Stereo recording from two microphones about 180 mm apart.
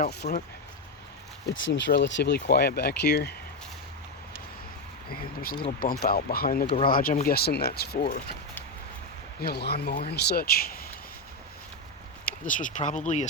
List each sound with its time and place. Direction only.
0.1 s speech: 65° left (ahead or behind)
1.5 s speech: 70° left (ahead or behind)
5.8 s speech: 55° left (ahead or behind)
6.7 s speech: 30° left (ahead or behind)
6.9 s speech: 50° left (ahead or behind)
8.0 s speech: 45° left (ahead or behind)
9.4 s speech: 60° left (ahead or behind)
12.2 s speech: 45° left (ahead or behind)